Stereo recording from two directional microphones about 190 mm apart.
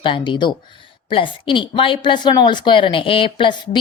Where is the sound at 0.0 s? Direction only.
25° left (ahead or behind).